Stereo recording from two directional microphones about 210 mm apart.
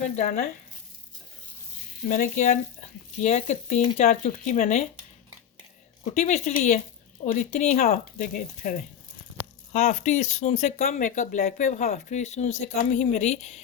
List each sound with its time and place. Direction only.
0.2 s speech: 35° left (ahead or behind)
2.0 s speech: 40° left (ahead or behind)
6.1 s speech: 35° left (ahead or behind)
9.7 s speech: 35° left (ahead or behind)